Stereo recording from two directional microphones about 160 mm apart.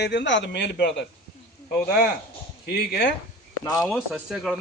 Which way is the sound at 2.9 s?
90° left.